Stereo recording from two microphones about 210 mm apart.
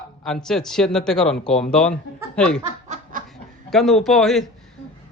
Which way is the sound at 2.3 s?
5° left (ahead or behind).